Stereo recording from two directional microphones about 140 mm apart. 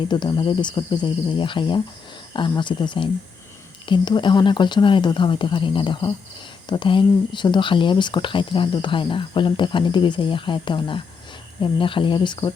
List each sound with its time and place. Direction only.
0.1 s speech: 30° left (ahead or behind)